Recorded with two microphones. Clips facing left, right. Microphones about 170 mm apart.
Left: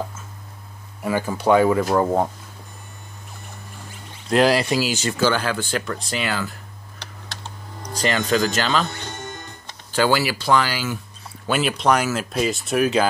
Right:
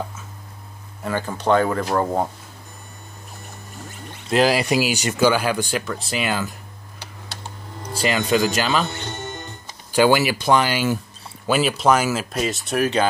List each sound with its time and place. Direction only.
1.0 s speech: 10° left (ahead or behind)
4.3 s speech: 5° right (ahead or behind)
4.6 s speech: 15° right (ahead or behind)
6.2 s speech: 15° right (ahead or behind)
7.8 s speech: 10° right (ahead or behind)
8.9 s music: 25° right (ahead or behind)
9.7 s speech: 15° right (ahead or behind)
11.4 s speech: 5° right (ahead or behind)